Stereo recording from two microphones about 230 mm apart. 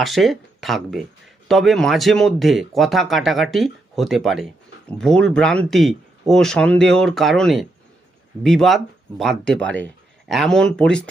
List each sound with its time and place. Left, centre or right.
0.0 s speech: centre